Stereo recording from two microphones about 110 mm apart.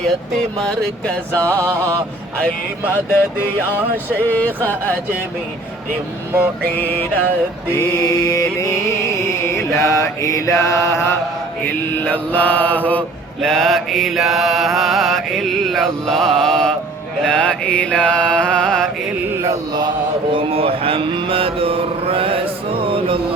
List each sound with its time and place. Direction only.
0.3 s mantra: 5° left (ahead or behind)
1.5 s mantra: 25° right (ahead or behind)
2.9 s mantra: 20° left (ahead or behind)
6.7 s mantra: 15° left (ahead or behind)
7.7 s music: 30° left (ahead or behind)
11.6 s mantra: 15° left (ahead or behind)
13.4 s mantra: centre (ahead or behind)
19.4 s mantra: 35° right (ahead or behind)
20.3 s mantra: 55° right (ahead or behind)